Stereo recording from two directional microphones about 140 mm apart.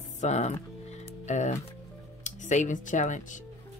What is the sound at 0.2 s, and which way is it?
Music, 55° left (ahead or behind).